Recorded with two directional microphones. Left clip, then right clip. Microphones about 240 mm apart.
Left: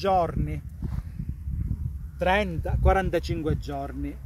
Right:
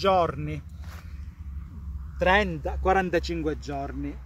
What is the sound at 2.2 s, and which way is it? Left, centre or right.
Speech, centre.